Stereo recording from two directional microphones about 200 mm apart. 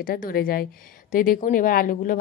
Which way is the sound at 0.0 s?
45° left (ahead or behind).